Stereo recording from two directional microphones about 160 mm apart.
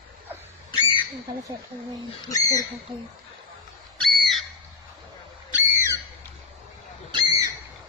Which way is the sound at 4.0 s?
Centre (ahead or behind).